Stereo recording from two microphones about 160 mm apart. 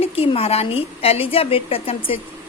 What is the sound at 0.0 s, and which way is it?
A woman's voice, 40° left (ahead or behind).